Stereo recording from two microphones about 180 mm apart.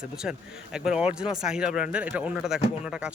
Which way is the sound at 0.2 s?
5° right (ahead or behind).